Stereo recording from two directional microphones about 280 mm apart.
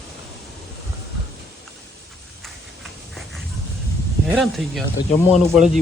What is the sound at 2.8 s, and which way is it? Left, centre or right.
Dog, centre.